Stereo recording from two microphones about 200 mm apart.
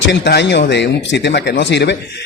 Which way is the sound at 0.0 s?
60° left (ahead or behind).